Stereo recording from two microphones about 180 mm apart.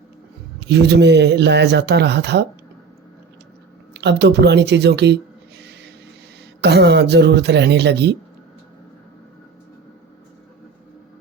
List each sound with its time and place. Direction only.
0.7 s speech: 70° right (ahead or behind)
3.9 s speech: 70° right (ahead or behind)